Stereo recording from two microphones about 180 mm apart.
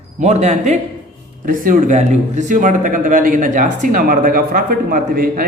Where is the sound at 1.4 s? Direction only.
50° right (ahead or behind).